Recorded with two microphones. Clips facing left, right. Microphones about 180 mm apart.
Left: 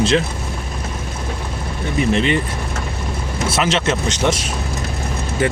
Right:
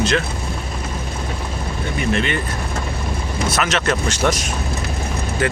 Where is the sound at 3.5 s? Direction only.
30° left (ahead or behind).